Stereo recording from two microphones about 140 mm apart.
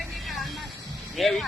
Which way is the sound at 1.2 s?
Centre (ahead or behind).